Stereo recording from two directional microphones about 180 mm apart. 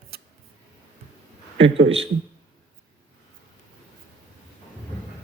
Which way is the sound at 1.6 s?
90° right.